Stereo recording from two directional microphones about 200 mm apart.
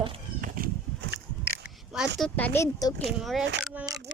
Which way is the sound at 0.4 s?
45° right (ahead or behind).